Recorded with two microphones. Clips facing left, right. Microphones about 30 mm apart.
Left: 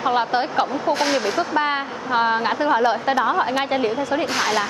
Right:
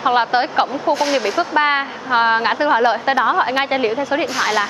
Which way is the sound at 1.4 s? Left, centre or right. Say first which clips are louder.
Right 5 dB; right.